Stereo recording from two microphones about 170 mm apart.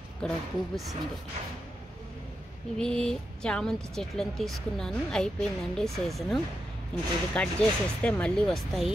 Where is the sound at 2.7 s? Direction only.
5° left (ahead or behind).